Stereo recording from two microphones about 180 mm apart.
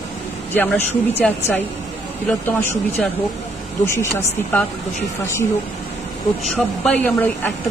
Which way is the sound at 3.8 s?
15° left (ahead or behind).